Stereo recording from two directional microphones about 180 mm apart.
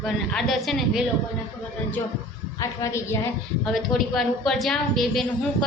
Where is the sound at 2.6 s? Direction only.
15° left (ahead or behind).